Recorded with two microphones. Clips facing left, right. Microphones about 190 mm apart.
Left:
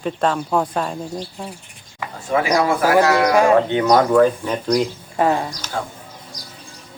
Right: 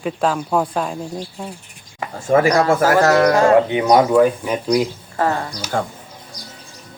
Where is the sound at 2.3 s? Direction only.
45° right (ahead or behind).